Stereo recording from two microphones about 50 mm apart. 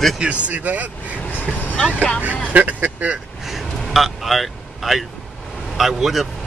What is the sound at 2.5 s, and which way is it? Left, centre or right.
Speech, right.